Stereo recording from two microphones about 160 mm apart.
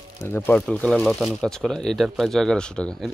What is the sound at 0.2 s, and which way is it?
Speech, 10° left (ahead or behind).